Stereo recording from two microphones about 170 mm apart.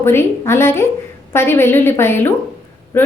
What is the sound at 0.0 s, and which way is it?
A woman's voice, 15° left (ahead or behind).